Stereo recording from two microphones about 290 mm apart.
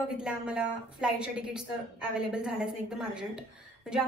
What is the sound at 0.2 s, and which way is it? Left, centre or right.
A woman's voice, centre.